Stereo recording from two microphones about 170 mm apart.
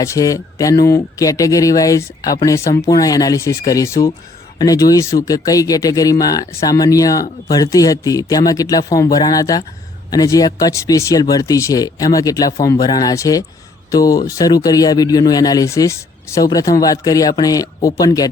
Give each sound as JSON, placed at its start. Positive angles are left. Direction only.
{"t": 0.0, "sound": "speech", "side_deg": 20}